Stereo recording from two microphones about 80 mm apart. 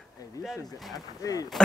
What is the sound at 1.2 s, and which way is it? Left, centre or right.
Speech, left.